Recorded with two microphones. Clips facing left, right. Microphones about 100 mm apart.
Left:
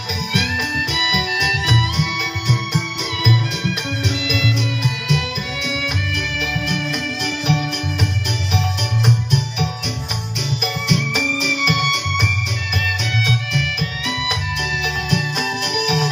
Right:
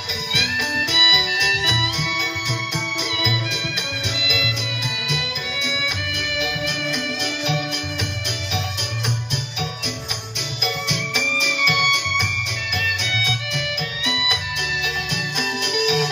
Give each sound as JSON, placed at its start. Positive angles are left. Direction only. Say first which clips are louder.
{"t": 0.9, "sound": "music", "louder": "left 3 dB", "side_deg": 35}
{"t": 2.7, "sound": "organ", "louder": "left 2 dB", "side_deg": 35}
{"t": 4.2, "sound": "music", "louder": "left 5 dB", "side_deg": 35}
{"t": 9.0, "sound": "music", "louder": "left 9 dB", "side_deg": 35}
{"t": 15.7, "sound": "music", "louder": "right 1 dB", "side_deg": 35}